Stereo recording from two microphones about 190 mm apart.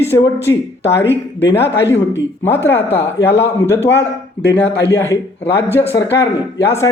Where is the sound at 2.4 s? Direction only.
10° left (ahead or behind).